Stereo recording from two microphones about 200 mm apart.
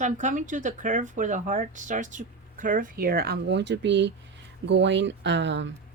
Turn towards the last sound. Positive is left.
turn(degrees=-65)  # may be behind; listen again after turning